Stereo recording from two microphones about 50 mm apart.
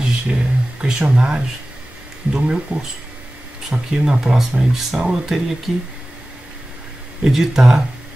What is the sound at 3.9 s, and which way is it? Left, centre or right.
Speech, centre.